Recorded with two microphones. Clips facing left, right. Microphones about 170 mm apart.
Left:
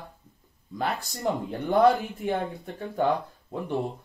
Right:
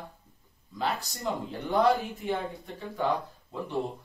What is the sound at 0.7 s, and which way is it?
Speech, 55° left (ahead or behind).